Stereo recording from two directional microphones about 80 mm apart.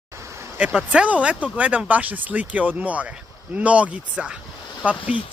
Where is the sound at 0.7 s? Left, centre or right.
Centre.